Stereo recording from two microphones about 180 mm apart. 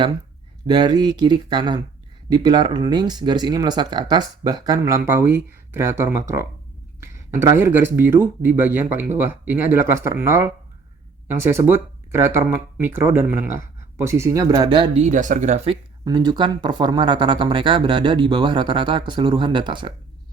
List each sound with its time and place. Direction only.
0.7 s speech: 25° right (ahead or behind)
15.0 s speech: 45° right (ahead or behind)
16.0 s speech: 25° right (ahead or behind)